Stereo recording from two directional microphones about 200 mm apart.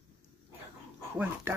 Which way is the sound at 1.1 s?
10° right (ahead or behind).